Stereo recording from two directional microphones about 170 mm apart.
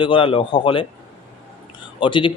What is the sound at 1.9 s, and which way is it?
Speech, 30° left (ahead or behind).